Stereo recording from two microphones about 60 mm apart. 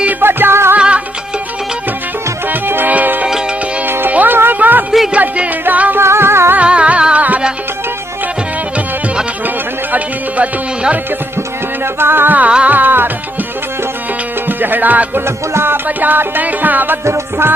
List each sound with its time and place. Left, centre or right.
0.2 s music: right
0.8 s music: centre
2.5 s music: right
4.4 s a sound: right
5.1 s music: right
6.0 s music: right
6.6 s music: right
9.9 s music: right
11.9 s music: right
12.5 s music: centre
12.7 s music: right
14.4 s music: right